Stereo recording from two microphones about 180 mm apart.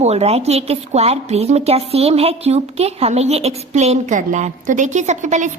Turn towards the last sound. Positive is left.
turn(degrees=-45)  # may be behind; listen again after turning